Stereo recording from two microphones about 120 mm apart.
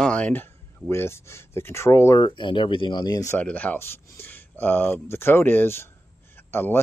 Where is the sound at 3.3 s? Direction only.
15° left (ahead or behind).